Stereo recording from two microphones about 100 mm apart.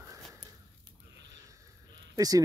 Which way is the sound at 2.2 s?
40° right (ahead or behind).